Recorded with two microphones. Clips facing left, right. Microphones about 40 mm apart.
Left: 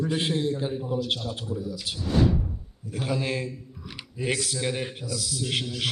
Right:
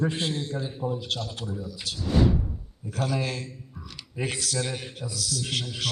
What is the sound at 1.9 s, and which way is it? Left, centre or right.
A man's voice, left.